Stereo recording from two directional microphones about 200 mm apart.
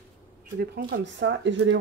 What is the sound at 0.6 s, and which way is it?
Speech, 50° right (ahead or behind).